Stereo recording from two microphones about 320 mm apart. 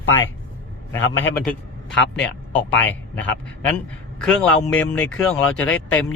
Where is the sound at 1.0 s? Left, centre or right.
Left.